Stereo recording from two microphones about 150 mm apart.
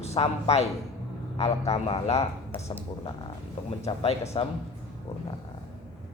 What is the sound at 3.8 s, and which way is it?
Speech, 45° left (ahead or behind).